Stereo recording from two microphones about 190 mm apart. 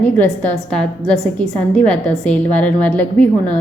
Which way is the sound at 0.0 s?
10° left (ahead or behind).